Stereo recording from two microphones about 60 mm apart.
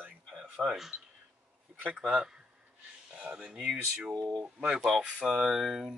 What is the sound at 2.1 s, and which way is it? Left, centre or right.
Speech, centre.